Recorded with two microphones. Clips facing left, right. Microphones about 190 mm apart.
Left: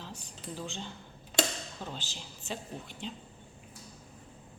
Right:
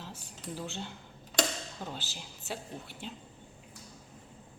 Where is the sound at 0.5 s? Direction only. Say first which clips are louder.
Right 1 dB; 10° right (ahead or behind).